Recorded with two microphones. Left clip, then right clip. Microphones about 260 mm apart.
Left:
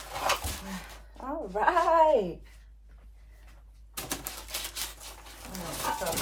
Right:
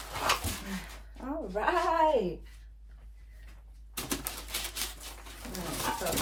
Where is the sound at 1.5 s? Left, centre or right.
Left.